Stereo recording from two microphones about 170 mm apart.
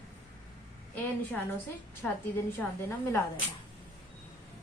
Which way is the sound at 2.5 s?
15° left (ahead or behind).